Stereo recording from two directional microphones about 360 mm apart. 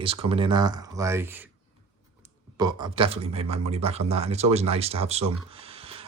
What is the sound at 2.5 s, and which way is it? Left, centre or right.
Speech, centre.